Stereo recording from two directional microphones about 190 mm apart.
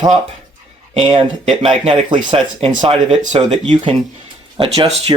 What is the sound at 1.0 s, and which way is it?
Speech, 25° right (ahead or behind).